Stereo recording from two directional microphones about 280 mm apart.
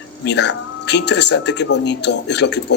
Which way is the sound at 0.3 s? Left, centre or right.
Left.